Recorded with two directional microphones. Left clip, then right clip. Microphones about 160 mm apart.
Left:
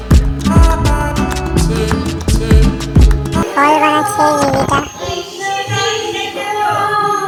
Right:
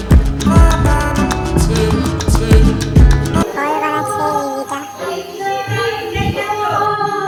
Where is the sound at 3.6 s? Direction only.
35° left (ahead or behind).